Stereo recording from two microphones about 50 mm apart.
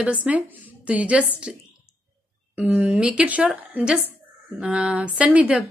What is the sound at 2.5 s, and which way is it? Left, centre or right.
Speech, right.